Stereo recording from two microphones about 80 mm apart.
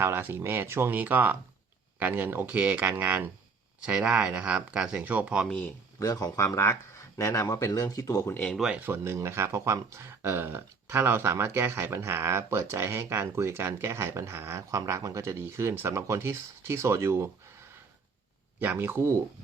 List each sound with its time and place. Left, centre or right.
0.0 s speech: right
3.8 s speech: centre
5.5 s speech: centre
6.0 s speech: left
8.5 s speech: centre
8.8 s speech: right
18.8 s speech: right